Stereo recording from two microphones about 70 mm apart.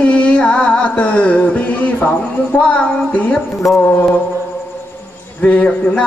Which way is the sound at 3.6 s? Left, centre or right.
Centre.